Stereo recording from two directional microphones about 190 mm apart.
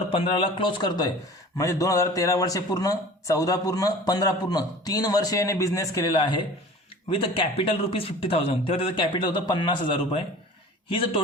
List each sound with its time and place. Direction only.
0.1 s a man's voice: 25° left (ahead or behind)